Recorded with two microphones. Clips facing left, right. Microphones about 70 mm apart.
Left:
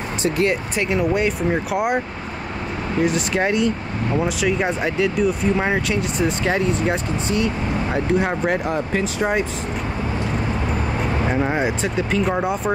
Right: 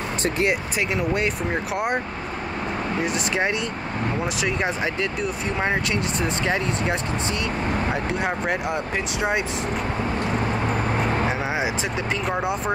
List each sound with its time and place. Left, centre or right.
0.5 s speech: centre
3.0 s speech: centre
7.2 s speech: right
7.9 s speech: centre
11.2 s speech: centre